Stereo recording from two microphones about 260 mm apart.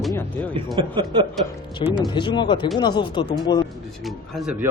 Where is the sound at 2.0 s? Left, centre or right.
Centre.